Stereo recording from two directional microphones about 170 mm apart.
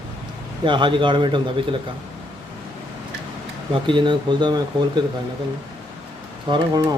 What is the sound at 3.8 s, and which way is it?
Speech, 30° right (ahead or behind).